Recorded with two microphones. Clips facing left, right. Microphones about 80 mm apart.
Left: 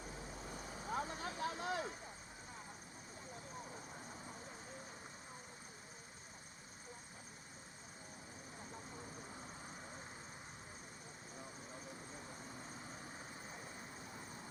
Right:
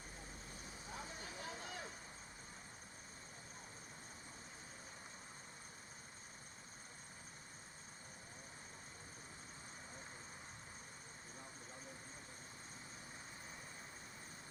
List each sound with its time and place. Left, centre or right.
0.9 s vehicle: left